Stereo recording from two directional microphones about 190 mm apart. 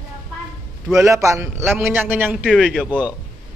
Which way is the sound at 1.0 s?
15° right (ahead or behind).